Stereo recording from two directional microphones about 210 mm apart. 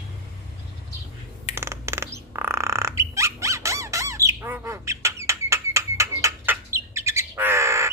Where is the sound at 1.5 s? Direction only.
15° right (ahead or behind).